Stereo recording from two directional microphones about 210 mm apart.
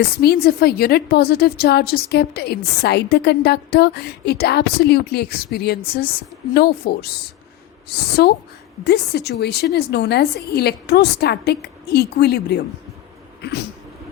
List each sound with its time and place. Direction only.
0.0 s a woman's voice: 50° left (ahead or behind)
13.4 s cat: 50° left (ahead or behind)